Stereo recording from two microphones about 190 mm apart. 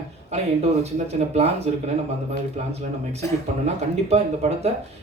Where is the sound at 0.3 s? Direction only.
35° right (ahead or behind).